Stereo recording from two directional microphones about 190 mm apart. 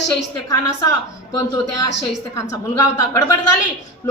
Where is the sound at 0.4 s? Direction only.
15° left (ahead or behind).